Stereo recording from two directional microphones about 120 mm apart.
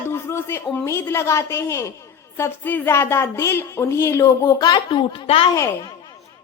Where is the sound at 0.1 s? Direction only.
20° left (ahead or behind).